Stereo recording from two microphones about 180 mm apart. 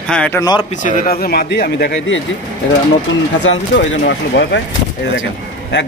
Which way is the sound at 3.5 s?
80° left.